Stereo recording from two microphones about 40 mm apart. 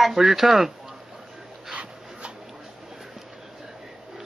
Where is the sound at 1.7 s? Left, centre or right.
Right.